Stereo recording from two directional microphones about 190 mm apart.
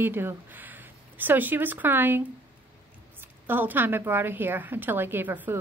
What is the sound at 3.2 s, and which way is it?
A woman's voice, 10° right (ahead or behind).